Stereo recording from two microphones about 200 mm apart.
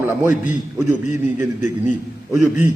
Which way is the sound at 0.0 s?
10° right (ahead or behind).